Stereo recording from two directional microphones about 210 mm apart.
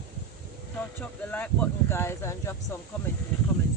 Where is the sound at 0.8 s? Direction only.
10° left (ahead or behind).